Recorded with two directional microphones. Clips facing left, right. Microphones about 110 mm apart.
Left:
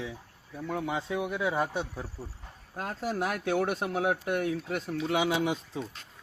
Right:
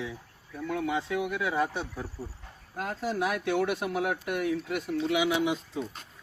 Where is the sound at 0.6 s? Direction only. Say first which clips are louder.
Right 2 dB; 30° left (ahead or behind).